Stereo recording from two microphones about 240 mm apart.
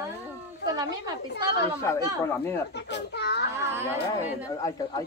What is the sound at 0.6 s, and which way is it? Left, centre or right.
Speech, centre.